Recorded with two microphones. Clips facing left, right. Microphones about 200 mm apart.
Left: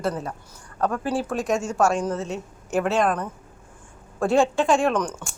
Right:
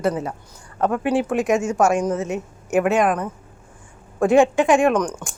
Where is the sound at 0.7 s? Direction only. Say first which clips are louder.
Right 5 dB; 20° right (ahead or behind).